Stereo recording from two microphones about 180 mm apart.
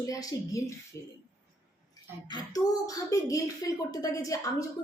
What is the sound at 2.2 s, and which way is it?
A woman's voice, 20° left (ahead or behind).